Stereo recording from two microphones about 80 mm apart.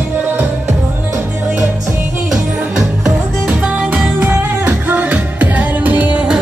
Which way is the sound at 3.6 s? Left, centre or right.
Centre.